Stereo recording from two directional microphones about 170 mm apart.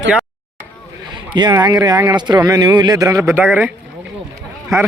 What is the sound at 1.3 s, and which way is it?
Speech, 25° right (ahead or behind).